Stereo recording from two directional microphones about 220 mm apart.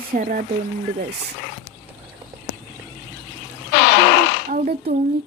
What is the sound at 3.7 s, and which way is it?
Fart, 50° left (ahead or behind).